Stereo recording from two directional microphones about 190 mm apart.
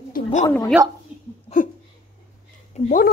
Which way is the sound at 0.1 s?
40° left (ahead or behind).